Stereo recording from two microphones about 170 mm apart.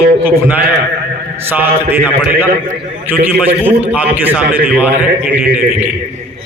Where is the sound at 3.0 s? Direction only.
10° right (ahead or behind).